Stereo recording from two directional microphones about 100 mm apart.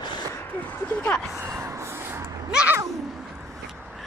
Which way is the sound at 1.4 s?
30° right (ahead or behind).